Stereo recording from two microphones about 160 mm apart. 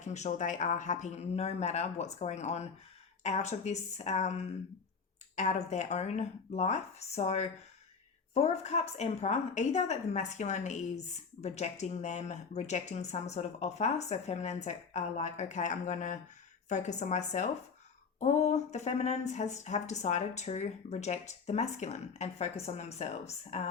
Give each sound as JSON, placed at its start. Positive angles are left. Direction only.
{"t": 0.0, "sound": "a woman's voice", "side_deg": 45}